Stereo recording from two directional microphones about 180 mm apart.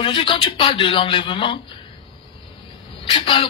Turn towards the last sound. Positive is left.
turn(degrees=30)  # may be behind; listen again after turning